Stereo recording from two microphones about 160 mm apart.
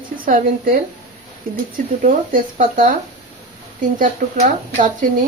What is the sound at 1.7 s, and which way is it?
Speech, 60° right (ahead or behind).